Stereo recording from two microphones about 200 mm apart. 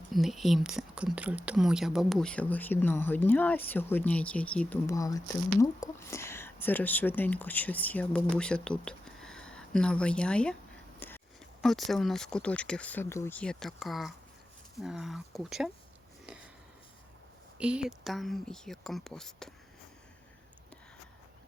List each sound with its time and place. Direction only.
0.1 s speech: centre (ahead or behind)
11.0 s a sound: 10° left (ahead or behind)
11.6 s speech: centre (ahead or behind)
17.6 s speech: 5° right (ahead or behind)